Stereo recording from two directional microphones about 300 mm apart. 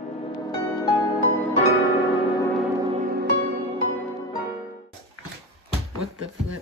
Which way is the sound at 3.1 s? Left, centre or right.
Right.